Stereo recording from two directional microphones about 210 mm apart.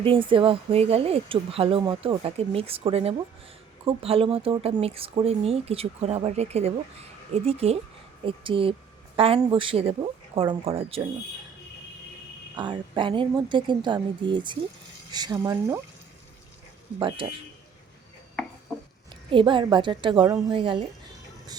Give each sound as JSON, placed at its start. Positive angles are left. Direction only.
{"t": 0.0, "sound": "speech", "side_deg": -25}
{"t": 12.5, "sound": "speech", "side_deg": -20}
{"t": 17.0, "sound": "speech", "side_deg": -25}
{"t": 19.3, "sound": "speech", "side_deg": -25}